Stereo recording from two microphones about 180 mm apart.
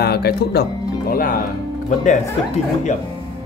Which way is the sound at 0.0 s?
60° left (ahead or behind).